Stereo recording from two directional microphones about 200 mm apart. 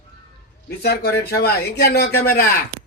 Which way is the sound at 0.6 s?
55° left (ahead or behind).